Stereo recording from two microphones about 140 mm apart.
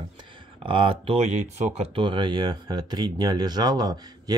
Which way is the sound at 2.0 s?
35° right (ahead or behind).